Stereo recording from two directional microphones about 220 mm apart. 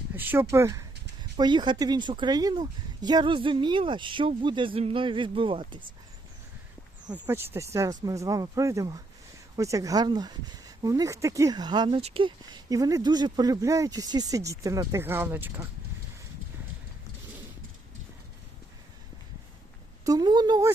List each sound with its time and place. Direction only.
0.2 s a sound: 10° right (ahead or behind)
0.5 s speech: 15° right (ahead or behind)
7.1 s speech: 10° right (ahead or behind)
20.1 s speech: 20° right (ahead or behind)